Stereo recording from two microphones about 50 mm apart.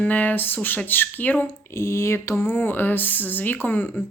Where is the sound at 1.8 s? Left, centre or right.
Left.